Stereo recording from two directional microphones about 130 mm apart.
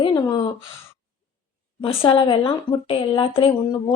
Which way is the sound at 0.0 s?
35° left (ahead or behind).